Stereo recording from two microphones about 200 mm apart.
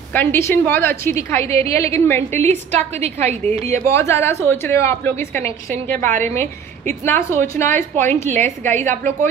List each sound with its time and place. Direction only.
0.1 s a woman's voice: 10° left (ahead or behind)
2.7 s a woman's voice: 35° right (ahead or behind)
3.8 s a woman's voice: 15° left (ahead or behind)